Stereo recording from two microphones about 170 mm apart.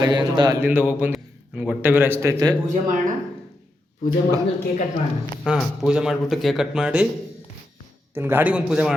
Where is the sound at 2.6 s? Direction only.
50° right (ahead or behind).